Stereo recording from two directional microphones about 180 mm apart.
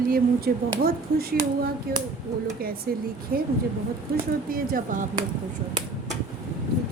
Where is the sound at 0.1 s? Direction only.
55° right (ahead or behind).